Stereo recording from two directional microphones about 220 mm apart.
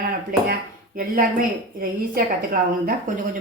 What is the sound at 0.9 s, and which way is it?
A woman's voice, 40° right (ahead or behind).